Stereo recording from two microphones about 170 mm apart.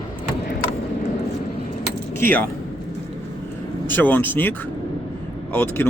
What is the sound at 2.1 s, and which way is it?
Keys jangling, 10° left (ahead or behind).